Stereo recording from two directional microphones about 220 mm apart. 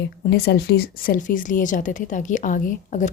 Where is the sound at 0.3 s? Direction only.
45° left (ahead or behind).